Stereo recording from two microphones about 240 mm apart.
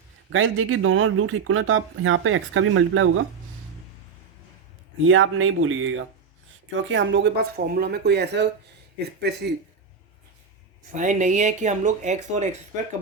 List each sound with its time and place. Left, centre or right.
0.3 s speech: right
5.0 s speech: right
10.9 s speech: right